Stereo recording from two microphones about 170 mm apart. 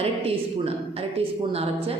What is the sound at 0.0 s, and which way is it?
A woman's voice, 35° right (ahead or behind).